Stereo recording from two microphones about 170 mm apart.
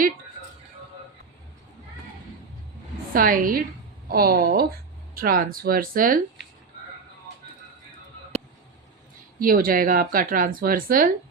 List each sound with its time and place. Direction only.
3.2 s speech: 55° right (ahead or behind)
9.4 s speech: 55° right (ahead or behind)